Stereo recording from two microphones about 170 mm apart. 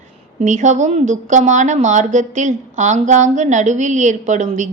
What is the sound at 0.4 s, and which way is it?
A woman's voice, 45° right (ahead or behind).